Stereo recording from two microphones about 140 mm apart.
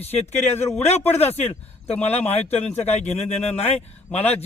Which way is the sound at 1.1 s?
50° left (ahead or behind).